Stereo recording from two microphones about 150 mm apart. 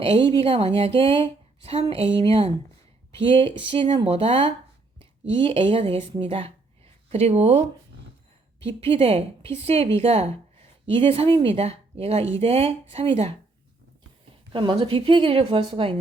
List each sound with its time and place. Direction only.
0.0 s a woman's voice: 35° right (ahead or behind)
8.8 s a woman's voice: 40° right (ahead or behind)
14.5 s a woman's voice: 35° right (ahead or behind)